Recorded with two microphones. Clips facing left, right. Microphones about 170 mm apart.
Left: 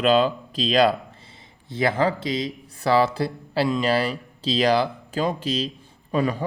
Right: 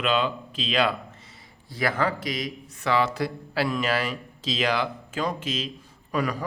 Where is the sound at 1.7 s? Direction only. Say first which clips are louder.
Left 4 dB; 25° left (ahead or behind).